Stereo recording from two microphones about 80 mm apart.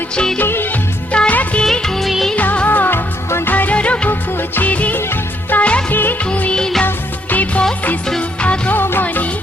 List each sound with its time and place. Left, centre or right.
0.3 s music: left
1.1 s music: centre
1.6 s music of bollywood: centre
2.3 s music: centre
3.5 s music: centre
4.4 s music of bollywood: left
6.8 s music: left
7.6 s music: centre